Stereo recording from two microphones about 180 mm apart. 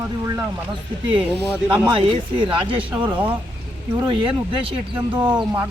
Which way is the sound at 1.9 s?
25° right (ahead or behind).